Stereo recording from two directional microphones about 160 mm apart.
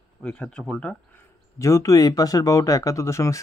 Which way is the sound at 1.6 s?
20° left (ahead or behind).